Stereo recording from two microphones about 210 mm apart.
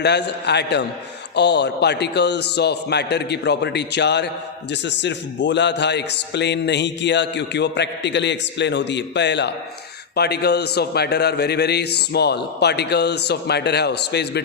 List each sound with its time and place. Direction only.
0.0 s a man's voice: 55° left (ahead or behind)